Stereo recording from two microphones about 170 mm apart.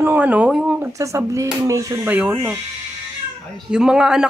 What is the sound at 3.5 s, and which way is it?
Speech, 5° right (ahead or behind).